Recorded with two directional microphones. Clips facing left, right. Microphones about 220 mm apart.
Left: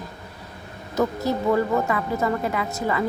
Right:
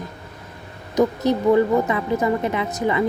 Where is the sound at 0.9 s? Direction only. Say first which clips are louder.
Right 4 dB; 20° right (ahead or behind).